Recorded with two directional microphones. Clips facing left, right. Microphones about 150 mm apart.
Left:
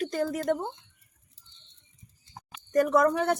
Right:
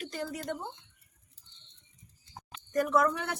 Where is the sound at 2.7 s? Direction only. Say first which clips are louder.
Left 5 dB; 45° left (ahead or behind).